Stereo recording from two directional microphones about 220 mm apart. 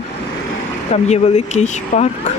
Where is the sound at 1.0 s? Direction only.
30° left (ahead or behind).